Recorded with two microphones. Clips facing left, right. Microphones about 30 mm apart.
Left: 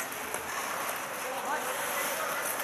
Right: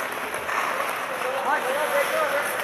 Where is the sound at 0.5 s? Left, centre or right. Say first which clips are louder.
Right 11 dB; right.